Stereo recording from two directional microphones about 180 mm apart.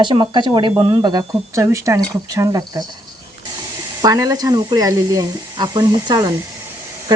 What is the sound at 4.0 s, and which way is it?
Speech, 20° right (ahead or behind).